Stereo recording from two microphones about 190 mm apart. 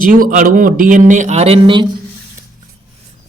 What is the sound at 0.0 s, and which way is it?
Speech, 45° right (ahead or behind).